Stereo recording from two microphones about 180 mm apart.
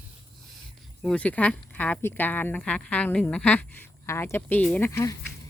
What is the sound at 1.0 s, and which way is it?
Speech, 5° left (ahead or behind).